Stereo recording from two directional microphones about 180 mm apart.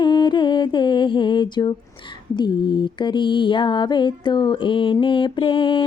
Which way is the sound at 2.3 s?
25° left (ahead or behind).